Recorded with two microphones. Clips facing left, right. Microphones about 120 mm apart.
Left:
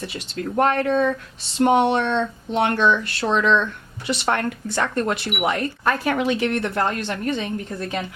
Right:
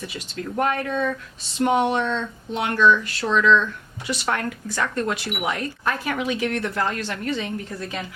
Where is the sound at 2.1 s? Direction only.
65° left (ahead or behind).